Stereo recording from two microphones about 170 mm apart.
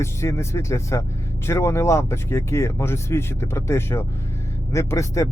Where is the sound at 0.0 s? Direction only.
15° left (ahead or behind).